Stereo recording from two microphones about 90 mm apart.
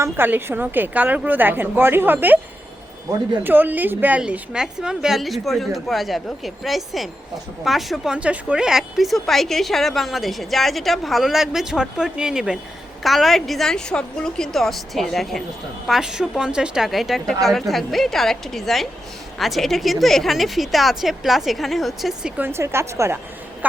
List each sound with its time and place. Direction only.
0.0 s a woman's voice: 25° right (ahead or behind)
3.4 s a woman's voice: 20° right (ahead or behind)
4.2 s a woman's voice: 10° right (ahead or behind)
8.1 s a woman's voice: 15° right (ahead or behind)
22.4 s a woman's voice: 25° right (ahead or behind)